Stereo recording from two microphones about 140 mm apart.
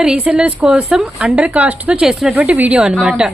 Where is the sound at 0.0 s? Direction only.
5° right (ahead or behind).